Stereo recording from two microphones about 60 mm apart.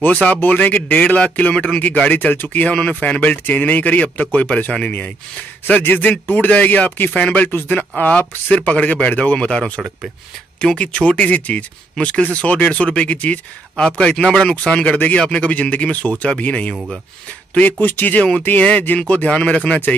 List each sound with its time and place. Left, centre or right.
0.0 s speech: left
10.8 s speech: centre
19.2 s speech: centre